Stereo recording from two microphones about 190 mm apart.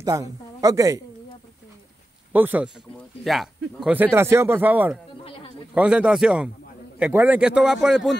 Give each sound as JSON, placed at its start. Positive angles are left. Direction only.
{"t": 0.0, "sound": "a woman's voice", "side_deg": -15}
{"t": 2.3, "sound": "speech", "side_deg": -10}
{"t": 5.2, "sound": "a sound", "side_deg": 30}
{"t": 5.8, "sound": "a man's voice", "side_deg": -5}